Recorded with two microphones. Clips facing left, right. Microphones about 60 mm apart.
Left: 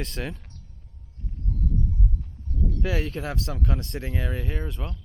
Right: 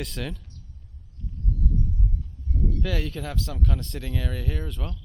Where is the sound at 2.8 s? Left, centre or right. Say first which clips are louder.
Left 2 dB; left.